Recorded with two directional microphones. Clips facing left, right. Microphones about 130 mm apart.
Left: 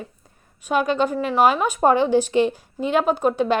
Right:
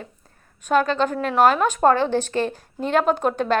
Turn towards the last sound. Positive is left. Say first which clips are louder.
# left 1 dB
turn(degrees=10)  # may be behind; listen again after turning